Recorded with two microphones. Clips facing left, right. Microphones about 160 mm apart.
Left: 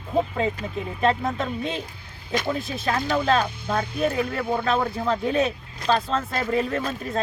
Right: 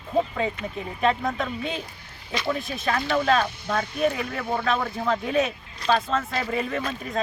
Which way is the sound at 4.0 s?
5° left (ahead or behind).